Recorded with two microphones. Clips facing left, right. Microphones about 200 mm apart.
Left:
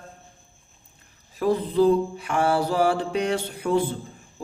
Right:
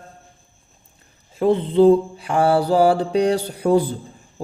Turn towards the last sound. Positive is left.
turn(degrees=-35)  # may be behind; listen again after turning